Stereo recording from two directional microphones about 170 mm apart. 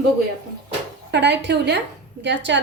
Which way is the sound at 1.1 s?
80° right.